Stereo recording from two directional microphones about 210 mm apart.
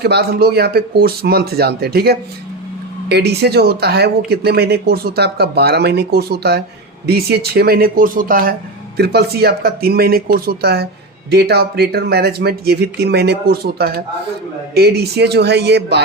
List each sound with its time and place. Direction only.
0.0 s speech: 50° right (ahead or behind)